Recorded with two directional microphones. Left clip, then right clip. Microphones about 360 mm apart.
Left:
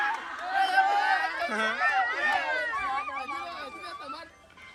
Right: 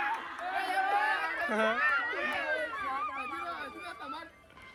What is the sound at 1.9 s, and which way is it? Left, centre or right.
Run, left.